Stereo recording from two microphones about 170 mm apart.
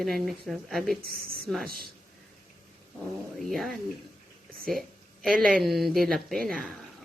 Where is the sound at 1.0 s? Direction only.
65° right (ahead or behind).